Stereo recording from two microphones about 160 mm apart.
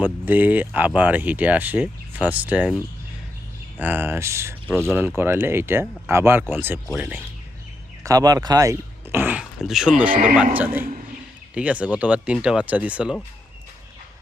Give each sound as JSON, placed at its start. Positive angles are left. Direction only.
{"t": 0.0, "sound": "speech", "side_deg": -10}
{"t": 8.0, "sound": "speech", "side_deg": -20}
{"t": 10.1, "sound": "speech", "side_deg": -60}
{"t": 10.3, "sound": "speech", "side_deg": -10}